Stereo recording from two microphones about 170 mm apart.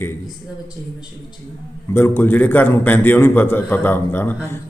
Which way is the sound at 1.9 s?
15° left (ahead or behind).